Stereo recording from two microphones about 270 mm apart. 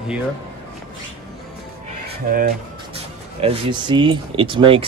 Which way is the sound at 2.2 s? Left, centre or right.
Right.